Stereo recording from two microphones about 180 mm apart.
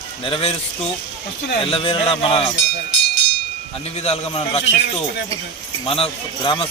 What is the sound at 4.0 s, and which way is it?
Speech, 35° left (ahead or behind).